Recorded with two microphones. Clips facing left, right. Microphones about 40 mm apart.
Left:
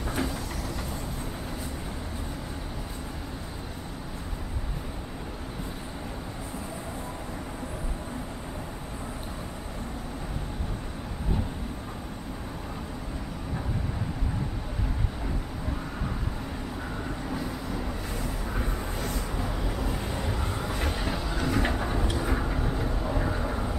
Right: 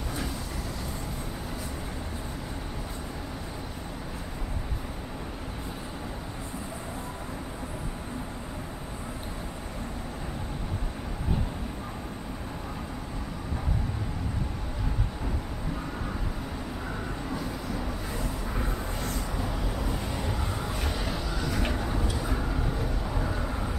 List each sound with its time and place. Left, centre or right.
17.3 s vehicle: centre
20.9 s vehicle: left
21.5 s a sound: left
22.1 s vehicle: left
23.0 s vehicle: centre